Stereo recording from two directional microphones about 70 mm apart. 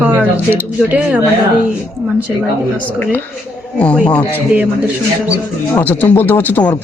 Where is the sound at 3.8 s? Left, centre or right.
Centre.